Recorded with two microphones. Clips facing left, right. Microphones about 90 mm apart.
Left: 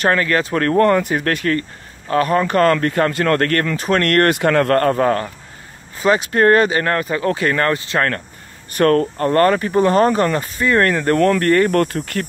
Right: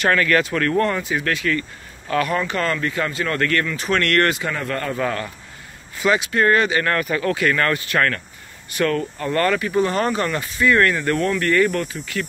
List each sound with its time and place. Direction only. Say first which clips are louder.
0.0 s speech: left 1 dB; 30° left (ahead or behind)
0.8 s speech: left 6 dB; 50° left (ahead or behind); by 8.1 s 30° left (ahead or behind)
8.7 s speech: left 7 dB; 45° left (ahead or behind)
11.8 s speech: left 6 dB; 60° left (ahead or behind)